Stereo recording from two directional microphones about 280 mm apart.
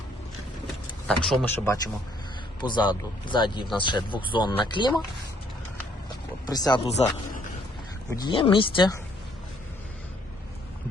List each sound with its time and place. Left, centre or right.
1.0 s speech: centre
6.5 s speech: centre
8.1 s speech: centre